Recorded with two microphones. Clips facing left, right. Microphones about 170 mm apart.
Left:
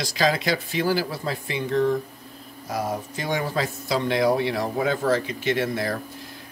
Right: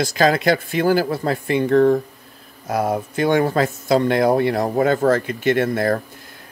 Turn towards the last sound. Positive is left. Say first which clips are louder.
# right 7 dB
turn(degrees=-50)  # may be behind; listen again after turning